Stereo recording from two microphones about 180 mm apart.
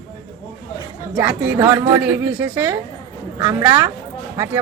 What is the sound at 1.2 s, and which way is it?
A woman's voice, 5° right (ahead or behind).